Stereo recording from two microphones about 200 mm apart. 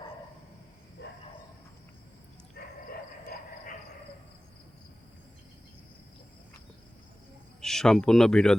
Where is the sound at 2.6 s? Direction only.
50° left (ahead or behind).